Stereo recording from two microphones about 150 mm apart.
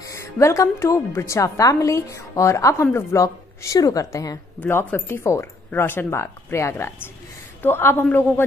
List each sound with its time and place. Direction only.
0.0 s a woman's voice: 20° left (ahead or behind)